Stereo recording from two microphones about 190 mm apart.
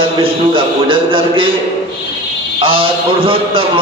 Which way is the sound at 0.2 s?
25° right (ahead or behind).